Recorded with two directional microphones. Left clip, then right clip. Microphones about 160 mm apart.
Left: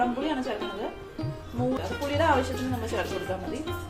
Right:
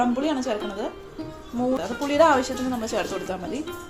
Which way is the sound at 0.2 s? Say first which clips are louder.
Right 4 dB; 35° right (ahead or behind).